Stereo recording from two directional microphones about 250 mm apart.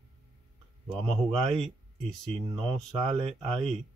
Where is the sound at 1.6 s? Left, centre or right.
Centre.